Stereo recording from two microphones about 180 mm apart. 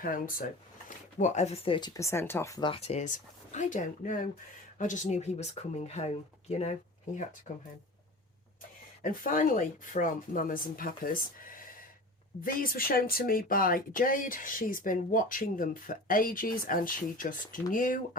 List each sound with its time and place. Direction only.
0.0 s speech: 50° left (ahead or behind)
7.5 s speech: 50° left (ahead or behind)
9.0 s speech: 50° left (ahead or behind)